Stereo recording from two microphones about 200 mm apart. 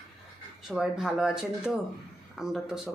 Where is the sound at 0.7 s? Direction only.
Centre (ahead or behind).